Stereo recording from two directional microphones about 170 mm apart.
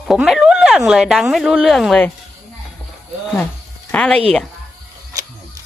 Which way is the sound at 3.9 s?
5° left (ahead or behind).